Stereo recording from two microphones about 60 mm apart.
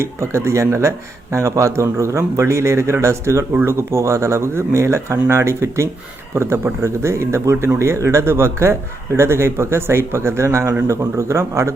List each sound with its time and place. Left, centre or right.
0.0 s speech: right